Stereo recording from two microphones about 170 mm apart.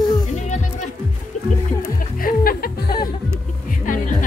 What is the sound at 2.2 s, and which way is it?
Music, 60° left (ahead or behind).